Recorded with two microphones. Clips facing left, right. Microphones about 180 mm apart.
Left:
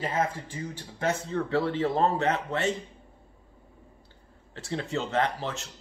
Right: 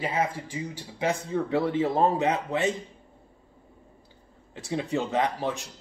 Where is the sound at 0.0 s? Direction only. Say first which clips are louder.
Right 1 dB; 10° right (ahead or behind).